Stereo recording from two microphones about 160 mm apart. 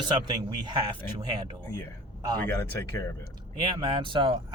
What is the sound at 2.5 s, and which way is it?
Speech, 15° left (ahead or behind).